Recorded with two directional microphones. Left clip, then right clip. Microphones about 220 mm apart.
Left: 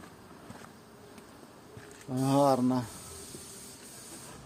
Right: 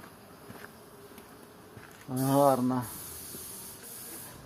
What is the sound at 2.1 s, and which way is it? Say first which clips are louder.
Speech: right 1 dB; centre (ahead or behind).